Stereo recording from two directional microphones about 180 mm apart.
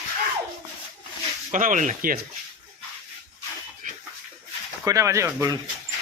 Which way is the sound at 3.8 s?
45° right (ahead or behind).